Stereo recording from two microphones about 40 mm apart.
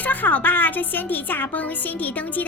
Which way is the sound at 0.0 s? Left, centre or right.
Left.